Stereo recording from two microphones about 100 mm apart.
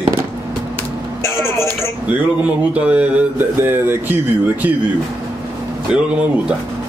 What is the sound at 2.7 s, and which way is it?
Speech, 10° right (ahead or behind).